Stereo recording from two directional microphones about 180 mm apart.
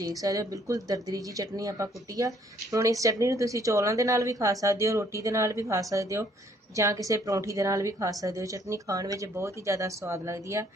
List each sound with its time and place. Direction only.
0.0 s speech: 20° right (ahead or behind)